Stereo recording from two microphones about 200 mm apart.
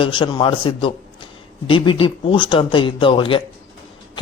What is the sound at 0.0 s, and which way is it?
A man's voice, 25° left (ahead or behind).